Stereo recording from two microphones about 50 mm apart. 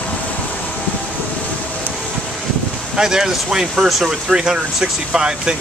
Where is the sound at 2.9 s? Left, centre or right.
Centre.